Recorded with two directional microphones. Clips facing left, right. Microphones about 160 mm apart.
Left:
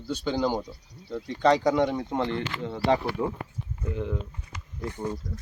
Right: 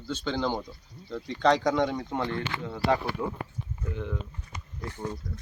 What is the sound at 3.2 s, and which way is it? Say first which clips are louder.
Speech: left 3 dB; 20° left (ahead or behind).